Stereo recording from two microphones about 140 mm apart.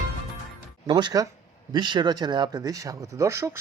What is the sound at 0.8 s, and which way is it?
Speech, 30° right (ahead or behind).